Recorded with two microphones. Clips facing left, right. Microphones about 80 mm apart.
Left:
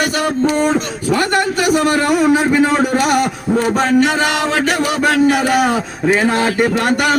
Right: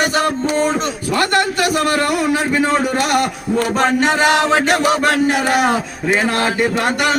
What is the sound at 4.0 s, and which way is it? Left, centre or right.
Chant, right.